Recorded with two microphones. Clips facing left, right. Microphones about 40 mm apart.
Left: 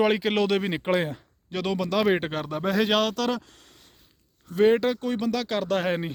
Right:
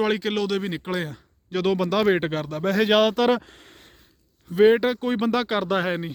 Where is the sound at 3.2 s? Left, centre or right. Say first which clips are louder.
Right 7 dB; right.